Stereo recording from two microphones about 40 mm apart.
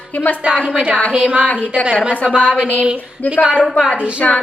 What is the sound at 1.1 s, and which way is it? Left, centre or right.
Speech, right.